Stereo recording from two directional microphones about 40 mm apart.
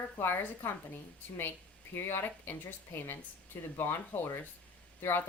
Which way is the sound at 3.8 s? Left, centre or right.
Left.